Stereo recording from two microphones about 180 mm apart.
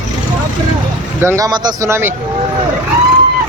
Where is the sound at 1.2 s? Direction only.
20° right (ahead or behind).